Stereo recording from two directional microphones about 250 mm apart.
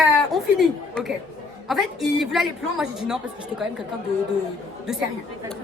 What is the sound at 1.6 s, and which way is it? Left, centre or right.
A woman's voice, centre.